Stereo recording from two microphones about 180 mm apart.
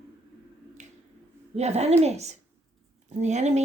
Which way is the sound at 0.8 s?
40° right (ahead or behind).